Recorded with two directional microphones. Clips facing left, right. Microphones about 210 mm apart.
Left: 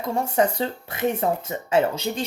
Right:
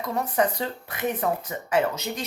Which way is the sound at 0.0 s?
30° left (ahead or behind).